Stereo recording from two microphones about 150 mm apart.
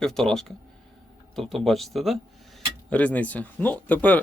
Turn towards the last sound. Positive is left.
turn(degrees=10)  # may be behind; listen again after turning